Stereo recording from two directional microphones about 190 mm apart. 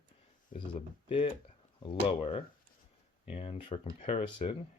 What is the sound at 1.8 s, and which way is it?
Speech, 30° left (ahead or behind).